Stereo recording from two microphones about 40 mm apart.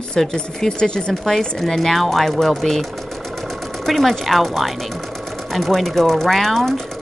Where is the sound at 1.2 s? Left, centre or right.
Centre.